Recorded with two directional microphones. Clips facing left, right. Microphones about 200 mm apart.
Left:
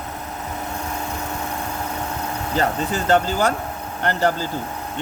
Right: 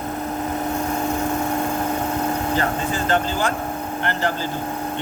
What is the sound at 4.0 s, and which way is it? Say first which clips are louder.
Speech: left 4 dB; 40° left (ahead or behind).